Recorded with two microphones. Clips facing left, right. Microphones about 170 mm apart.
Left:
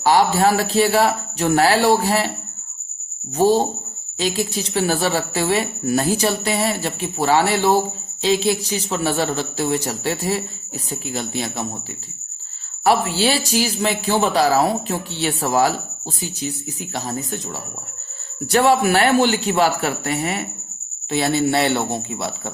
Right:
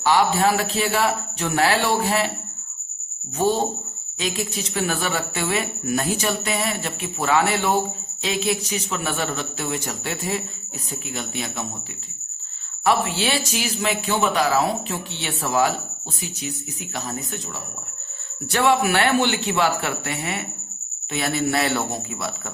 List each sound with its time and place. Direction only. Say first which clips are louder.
0.0 s speech: left 3 dB; 40° left (ahead or behind)
3.3 s speech: left 5 dB; 35° left (ahead or behind)
12.8 s speech: left 4 dB; 35° left (ahead or behind)
18.5 s a man's voice: left 4 dB; 40° left (ahead or behind)